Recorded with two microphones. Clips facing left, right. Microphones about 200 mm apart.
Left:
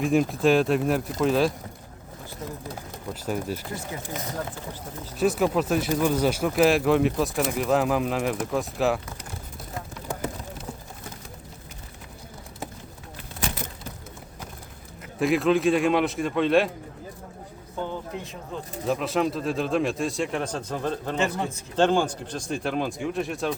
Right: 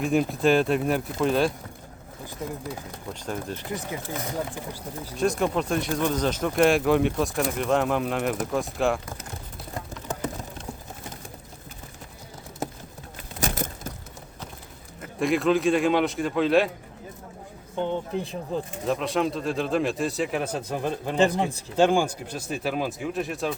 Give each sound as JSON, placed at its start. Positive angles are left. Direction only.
{"t": 0.0, "sound": "speech", "side_deg": 0}
{"t": 3.1, "sound": "speech", "side_deg": 10}
{"t": 3.7, "sound": "speech", "side_deg": -20}
{"t": 5.1, "sound": "speech", "side_deg": 5}
{"t": 13.4, "sound": "a sound", "side_deg": -40}
{"t": 15.2, "sound": "speech", "side_deg": 0}
{"t": 17.7, "sound": "speech", "side_deg": -25}
{"t": 18.9, "sound": "speech", "side_deg": 0}
{"t": 21.2, "sound": "speech", "side_deg": -35}
{"t": 21.8, "sound": "speech", "side_deg": -10}